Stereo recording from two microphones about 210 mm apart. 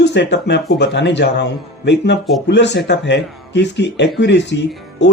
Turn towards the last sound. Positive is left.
turn(degrees=55)  # may be behind; listen again after turning